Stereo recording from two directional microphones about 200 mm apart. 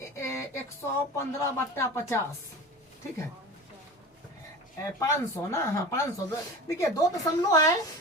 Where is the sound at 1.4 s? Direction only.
15° left (ahead or behind).